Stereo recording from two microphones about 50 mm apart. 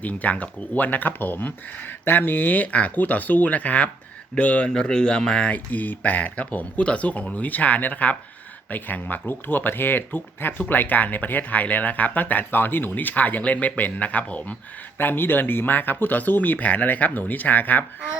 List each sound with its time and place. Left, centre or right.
0.0 s speech: left
4.7 s speech: centre
5.5 s speech: left
14.9 s speech: left